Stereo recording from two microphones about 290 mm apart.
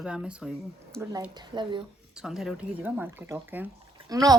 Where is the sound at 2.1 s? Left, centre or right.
Centre.